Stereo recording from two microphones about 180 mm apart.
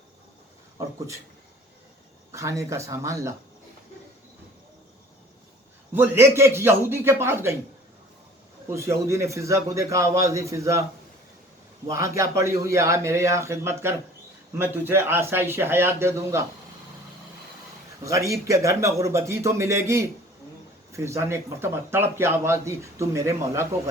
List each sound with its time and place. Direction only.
2.3 s speech: 15° right (ahead or behind)
5.9 s speech: 15° right (ahead or behind)
8.7 s speech: 15° right (ahead or behind)
11.9 s speech: 15° right (ahead or behind)
18.0 s speech: 15° right (ahead or behind)